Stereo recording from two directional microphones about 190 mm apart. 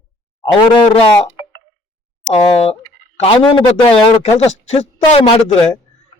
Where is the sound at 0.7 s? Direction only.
25° left (ahead or behind).